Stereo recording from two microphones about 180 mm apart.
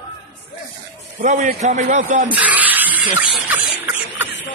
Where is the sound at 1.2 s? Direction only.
40° right (ahead or behind).